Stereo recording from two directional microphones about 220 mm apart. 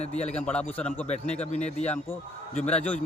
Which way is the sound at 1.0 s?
30° left (ahead or behind).